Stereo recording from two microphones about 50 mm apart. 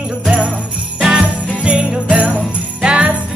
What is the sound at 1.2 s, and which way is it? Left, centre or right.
Jingle bell, right.